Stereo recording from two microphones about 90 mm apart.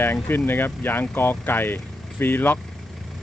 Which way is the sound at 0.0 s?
25° left (ahead or behind).